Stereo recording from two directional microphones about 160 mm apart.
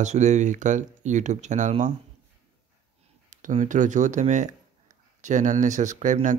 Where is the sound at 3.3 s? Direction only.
50° right (ahead or behind).